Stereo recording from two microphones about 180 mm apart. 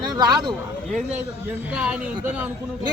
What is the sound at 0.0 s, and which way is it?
Speech, 25° right (ahead or behind).